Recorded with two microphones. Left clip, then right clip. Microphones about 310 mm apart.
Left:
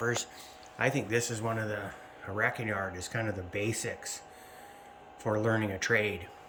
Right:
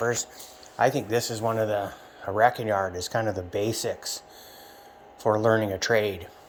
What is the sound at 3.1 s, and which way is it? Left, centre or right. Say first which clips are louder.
Speech: right 8 dB; right.